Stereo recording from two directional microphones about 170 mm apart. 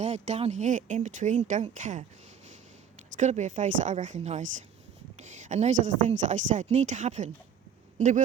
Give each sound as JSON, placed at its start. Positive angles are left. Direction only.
{"t": 0.0, "sound": "speech", "side_deg": -40}
{"t": 3.2, "sound": "speech", "side_deg": -45}